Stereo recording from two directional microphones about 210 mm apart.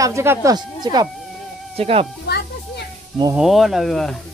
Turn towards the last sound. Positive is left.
turn(degrees=0)  # may be behind; listen again after turning